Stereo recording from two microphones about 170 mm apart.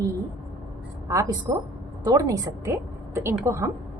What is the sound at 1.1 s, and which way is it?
A woman's voice, 20° right (ahead or behind).